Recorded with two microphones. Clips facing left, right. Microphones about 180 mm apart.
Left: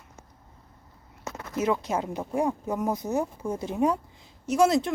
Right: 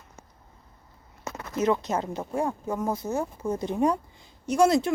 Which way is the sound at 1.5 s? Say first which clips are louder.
Right 1 dB; 10° left (ahead or behind).